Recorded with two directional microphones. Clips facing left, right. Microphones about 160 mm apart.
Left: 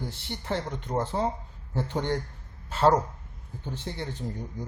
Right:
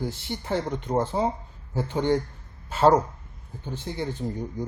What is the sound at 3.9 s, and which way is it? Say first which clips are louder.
Speech: right 5 dB; 5° right (ahead or behind).